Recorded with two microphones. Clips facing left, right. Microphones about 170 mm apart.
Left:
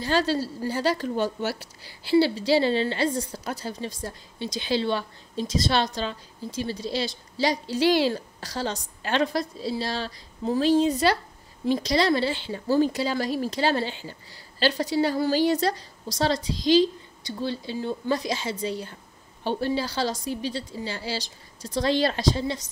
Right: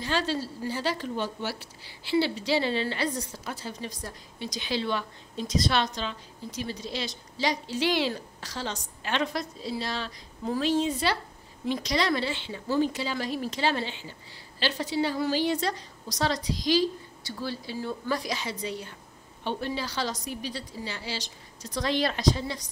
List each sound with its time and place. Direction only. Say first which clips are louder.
0.0 s a woman's voice: left 5 dB; 35° left (ahead or behind)
3.9 s a woman's voice: left 4 dB; 25° left (ahead or behind)